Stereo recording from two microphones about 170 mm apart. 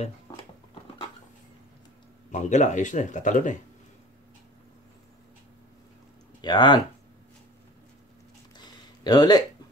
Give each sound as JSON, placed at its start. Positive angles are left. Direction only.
{"t": 2.3, "sound": "speech", "side_deg": 45}
{"t": 6.4, "sound": "speech", "side_deg": 25}
{"t": 8.5, "sound": "a sound", "side_deg": 25}